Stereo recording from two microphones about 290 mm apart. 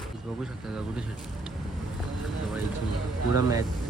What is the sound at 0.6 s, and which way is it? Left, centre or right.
Speech, centre.